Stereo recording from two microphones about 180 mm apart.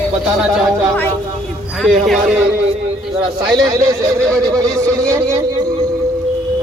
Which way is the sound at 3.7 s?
20° right (ahead or behind).